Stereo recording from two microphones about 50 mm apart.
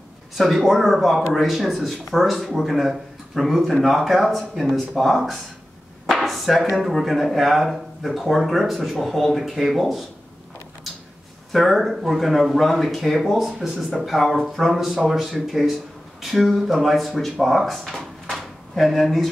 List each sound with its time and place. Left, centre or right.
0.4 s speech: centre
11.5 s speech: centre
18.3 s a sound: centre